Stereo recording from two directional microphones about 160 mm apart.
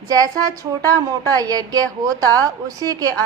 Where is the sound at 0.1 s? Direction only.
20° right (ahead or behind).